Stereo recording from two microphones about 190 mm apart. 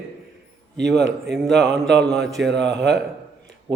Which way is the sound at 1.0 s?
65° right (ahead or behind).